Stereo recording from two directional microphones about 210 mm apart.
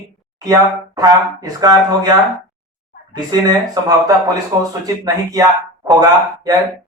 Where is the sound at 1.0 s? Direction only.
15° right (ahead or behind).